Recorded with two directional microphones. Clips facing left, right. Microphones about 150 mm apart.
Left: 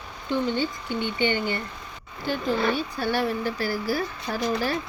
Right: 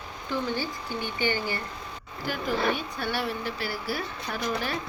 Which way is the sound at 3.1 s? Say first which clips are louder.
Left 5 dB; 45° left (ahead or behind).